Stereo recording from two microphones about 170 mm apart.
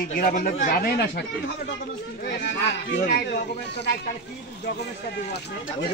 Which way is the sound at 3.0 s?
70° left (ahead or behind).